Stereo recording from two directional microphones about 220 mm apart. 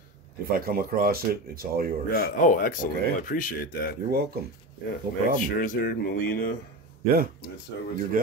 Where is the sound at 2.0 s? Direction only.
45° left (ahead or behind).